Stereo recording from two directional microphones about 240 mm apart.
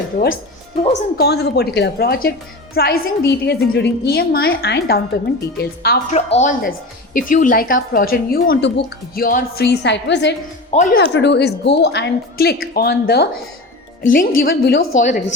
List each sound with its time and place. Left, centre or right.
1.2 s a woman's voice: left
10.7 s speech: left
11.0 s a woman's voice: left